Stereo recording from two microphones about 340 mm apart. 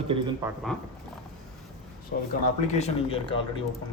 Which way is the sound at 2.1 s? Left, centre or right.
Left.